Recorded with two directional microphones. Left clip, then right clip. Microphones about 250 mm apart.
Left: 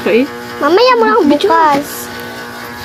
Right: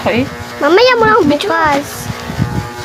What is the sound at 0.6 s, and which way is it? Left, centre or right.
Speech, centre.